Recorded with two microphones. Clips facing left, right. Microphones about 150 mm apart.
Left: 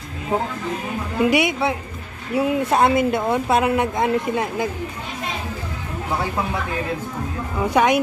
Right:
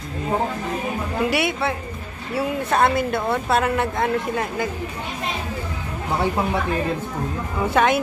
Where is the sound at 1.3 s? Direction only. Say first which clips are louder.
Left 3 dB; 20° left (ahead or behind).